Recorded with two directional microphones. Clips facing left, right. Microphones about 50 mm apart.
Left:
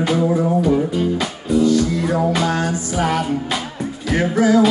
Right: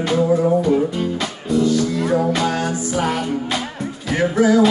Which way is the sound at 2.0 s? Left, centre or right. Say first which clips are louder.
Even; centre.